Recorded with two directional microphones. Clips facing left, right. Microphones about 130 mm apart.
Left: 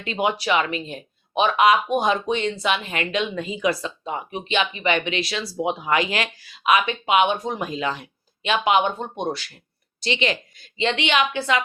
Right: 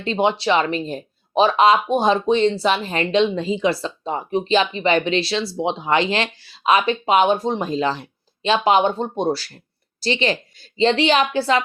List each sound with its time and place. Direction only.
0.0 s speech: 30° right (ahead or behind)